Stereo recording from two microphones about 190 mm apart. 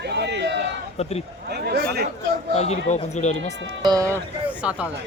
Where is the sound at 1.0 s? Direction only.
35° left (ahead or behind).